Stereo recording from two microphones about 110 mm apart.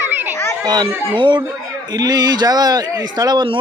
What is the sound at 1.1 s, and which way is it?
Speech, 45° right (ahead or behind).